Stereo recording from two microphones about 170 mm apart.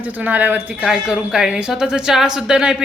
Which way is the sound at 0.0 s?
10° right (ahead or behind).